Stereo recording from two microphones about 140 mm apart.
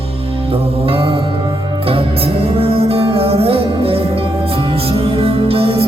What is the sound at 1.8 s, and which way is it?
Music, 40° right (ahead or behind).